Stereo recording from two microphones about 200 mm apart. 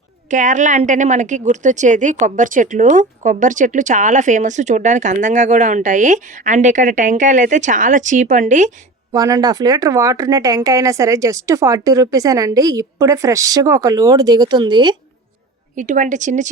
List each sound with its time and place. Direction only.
0.3 s a woman's voice: 40° right (ahead or behind)
9.1 s speech: 15° right (ahead or behind)
15.7 s a woman's voice: 40° right (ahead or behind)